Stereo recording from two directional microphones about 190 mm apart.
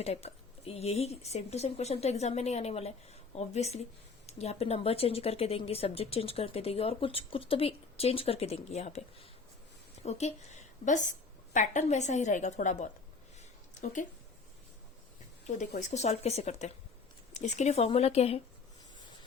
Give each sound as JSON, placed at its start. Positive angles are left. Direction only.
{"t": 0.0, "sound": "a woman's voice", "side_deg": 35}
{"t": 13.4, "sound": "a sound", "side_deg": 40}
{"t": 15.4, "sound": "speech", "side_deg": 35}